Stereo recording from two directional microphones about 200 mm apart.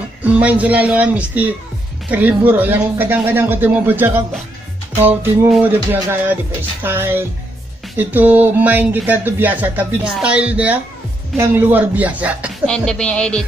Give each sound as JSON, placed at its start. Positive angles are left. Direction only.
{"t": 0.2, "sound": "speech", "side_deg": -5}
{"t": 12.6, "sound": "speech", "side_deg": 5}